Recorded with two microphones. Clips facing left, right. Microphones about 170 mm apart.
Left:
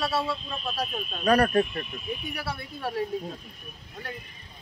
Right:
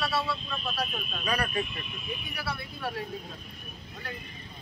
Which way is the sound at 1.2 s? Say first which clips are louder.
Left 10 dB; 45° left (ahead or behind).